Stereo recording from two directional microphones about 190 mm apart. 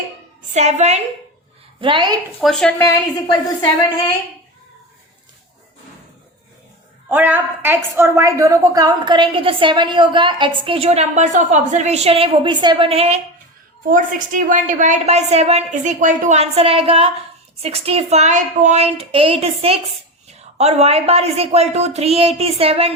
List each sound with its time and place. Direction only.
0.5 s a woman's voice: 35° right (ahead or behind)
1.8 s a woman's voice: 25° right (ahead or behind)
2.4 s speech: 5° left (ahead or behind)
7.1 s a woman's voice: 10° right (ahead or behind); by 13.2 s 30° right (ahead or behind)
13.9 s a woman's voice: 45° right (ahead or behind)